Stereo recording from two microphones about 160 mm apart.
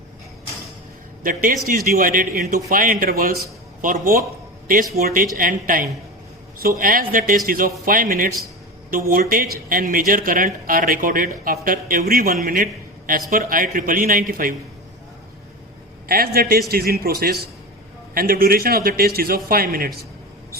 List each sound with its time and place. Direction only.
1.2 s speech: 60° right (ahead or behind)
16.0 s a man's voice: 70° right (ahead or behind)